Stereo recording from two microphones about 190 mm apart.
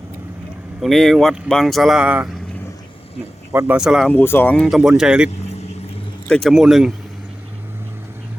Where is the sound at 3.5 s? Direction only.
10° right (ahead or behind).